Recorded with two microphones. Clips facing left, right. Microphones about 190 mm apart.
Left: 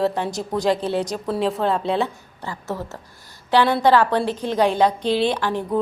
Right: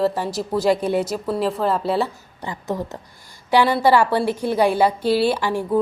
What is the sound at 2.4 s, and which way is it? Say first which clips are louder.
A woman's voice: right 3 dB; 15° right (ahead or behind).